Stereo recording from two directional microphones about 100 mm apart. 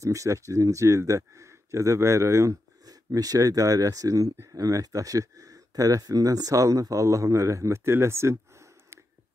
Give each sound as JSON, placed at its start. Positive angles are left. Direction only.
{"t": 0.0, "sound": "speech", "side_deg": -30}